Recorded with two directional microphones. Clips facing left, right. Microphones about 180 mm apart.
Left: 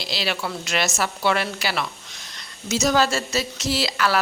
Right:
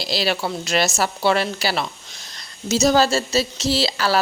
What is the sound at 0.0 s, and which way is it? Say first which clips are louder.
A woman's voice: right 4 dB; 40° right (ahead or behind).